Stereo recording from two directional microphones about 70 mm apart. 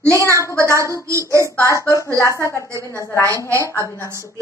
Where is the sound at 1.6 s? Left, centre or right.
Left.